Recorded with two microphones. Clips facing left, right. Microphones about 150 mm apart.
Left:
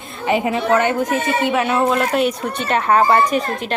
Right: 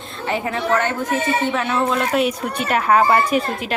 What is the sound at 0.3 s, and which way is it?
A woman's voice, 15° left (ahead or behind).